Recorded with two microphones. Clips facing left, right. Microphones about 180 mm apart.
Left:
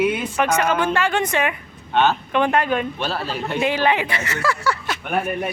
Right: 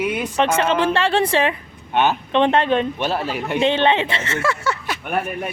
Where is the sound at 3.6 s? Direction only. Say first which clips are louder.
Right 3 dB; 25° right (ahead or behind).